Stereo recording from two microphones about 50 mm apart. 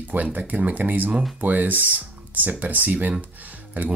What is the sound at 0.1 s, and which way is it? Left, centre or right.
Speech, right.